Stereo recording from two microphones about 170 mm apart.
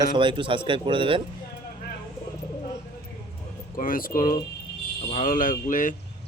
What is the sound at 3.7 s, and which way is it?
Speech, 55° left (ahead or behind).